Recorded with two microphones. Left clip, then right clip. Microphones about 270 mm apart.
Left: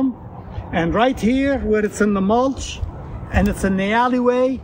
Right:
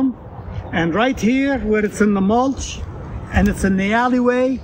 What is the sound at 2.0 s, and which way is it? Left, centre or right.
A man's voice, centre.